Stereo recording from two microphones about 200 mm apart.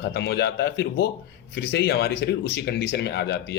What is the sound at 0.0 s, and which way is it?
Speech, 55° left (ahead or behind).